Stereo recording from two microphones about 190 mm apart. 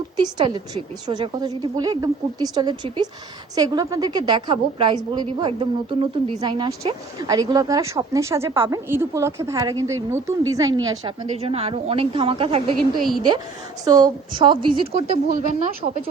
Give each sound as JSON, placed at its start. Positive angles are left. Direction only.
{"t": 0.2, "sound": "a woman's voice", "side_deg": -25}
{"t": 13.8, "sound": "a woman's voice", "side_deg": -20}